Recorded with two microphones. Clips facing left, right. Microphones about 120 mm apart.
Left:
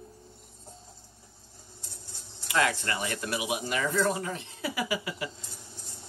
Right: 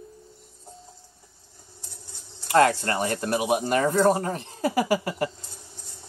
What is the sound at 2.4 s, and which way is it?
Speech, 45° right (ahead or behind).